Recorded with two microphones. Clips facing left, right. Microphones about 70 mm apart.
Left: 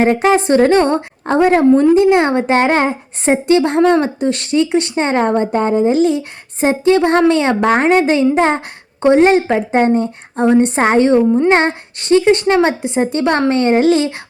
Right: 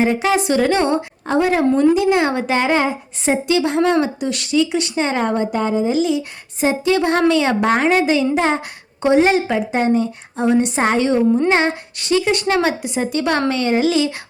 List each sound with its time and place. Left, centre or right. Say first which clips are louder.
0.0 s speech: left 4 dB; left
1.7 s speech: left 5 dB; left